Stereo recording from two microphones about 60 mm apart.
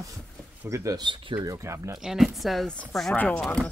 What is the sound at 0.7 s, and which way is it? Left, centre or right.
Speech, right.